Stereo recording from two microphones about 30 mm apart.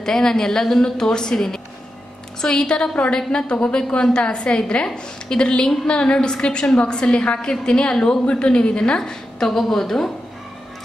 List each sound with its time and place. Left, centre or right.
0.0 s a woman's voice: centre
8.3 s a woman's voice: left
9.5 s speech: centre